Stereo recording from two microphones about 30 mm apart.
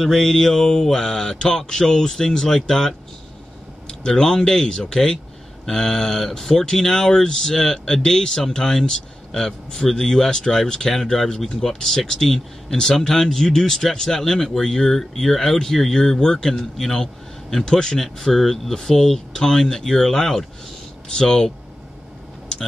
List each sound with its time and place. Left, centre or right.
0.0 s mantra: centre
0.3 s speech: centre
10.9 s a man's voice: centre